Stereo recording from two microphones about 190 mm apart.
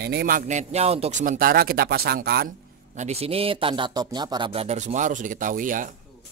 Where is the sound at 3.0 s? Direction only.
35° right (ahead or behind).